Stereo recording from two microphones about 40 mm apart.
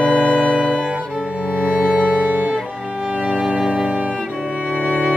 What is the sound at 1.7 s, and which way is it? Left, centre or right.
Music, centre.